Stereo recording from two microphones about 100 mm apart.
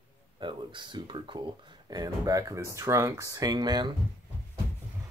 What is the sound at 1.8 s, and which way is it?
Speech, 40° right (ahead or behind).